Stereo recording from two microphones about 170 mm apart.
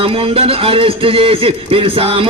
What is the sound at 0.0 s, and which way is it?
Speech, 35° right (ahead or behind).